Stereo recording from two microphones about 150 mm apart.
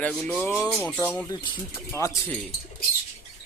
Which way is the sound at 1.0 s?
10° left (ahead or behind).